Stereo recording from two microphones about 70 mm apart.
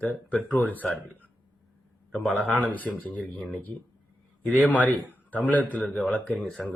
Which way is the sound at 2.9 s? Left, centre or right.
Centre.